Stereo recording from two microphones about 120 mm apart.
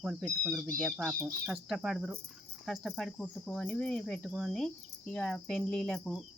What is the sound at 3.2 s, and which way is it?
Speech, 10° left (ahead or behind).